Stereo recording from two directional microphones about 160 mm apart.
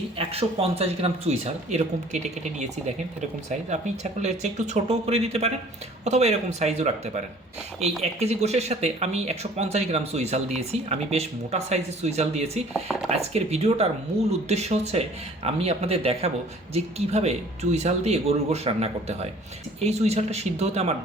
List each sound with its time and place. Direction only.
0.2 s speech: 35° right (ahead or behind)
12.7 s speech: centre (ahead or behind)
13.1 s speech: 40° right (ahead or behind)